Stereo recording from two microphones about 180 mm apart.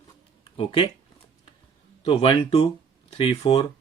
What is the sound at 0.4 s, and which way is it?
Speech, 30° left (ahead or behind).